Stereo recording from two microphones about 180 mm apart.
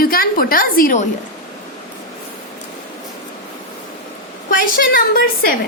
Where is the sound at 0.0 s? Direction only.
55° left (ahead or behind).